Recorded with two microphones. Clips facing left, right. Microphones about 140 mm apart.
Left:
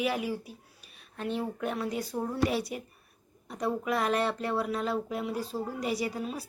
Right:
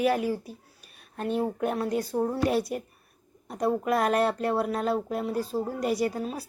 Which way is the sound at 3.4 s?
45° right (ahead or behind).